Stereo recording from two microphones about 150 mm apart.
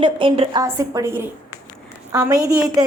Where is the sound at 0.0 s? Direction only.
35° right (ahead or behind).